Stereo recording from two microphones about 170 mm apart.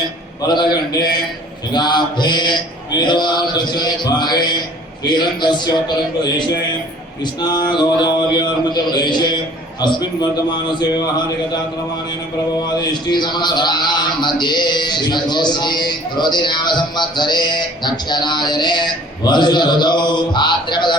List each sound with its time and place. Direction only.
0.4 s a man's voice: 25° left (ahead or behind)
7.4 s a man's voice: 25° left (ahead or behind)
12.9 s a man's voice: 25° left (ahead or behind)